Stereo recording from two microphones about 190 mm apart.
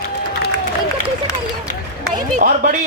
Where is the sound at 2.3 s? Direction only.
40° right (ahead or behind).